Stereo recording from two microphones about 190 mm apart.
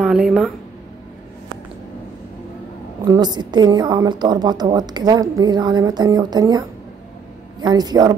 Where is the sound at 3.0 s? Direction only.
20° right (ahead or behind).